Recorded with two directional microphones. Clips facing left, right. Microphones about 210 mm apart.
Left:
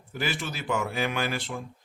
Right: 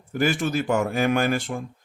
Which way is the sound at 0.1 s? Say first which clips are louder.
Right 9 dB; 45° right (ahead or behind).